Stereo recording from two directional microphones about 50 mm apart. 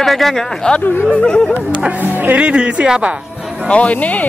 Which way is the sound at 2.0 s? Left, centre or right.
Right.